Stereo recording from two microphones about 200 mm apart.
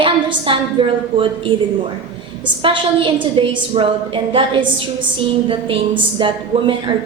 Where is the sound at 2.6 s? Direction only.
25° right (ahead or behind).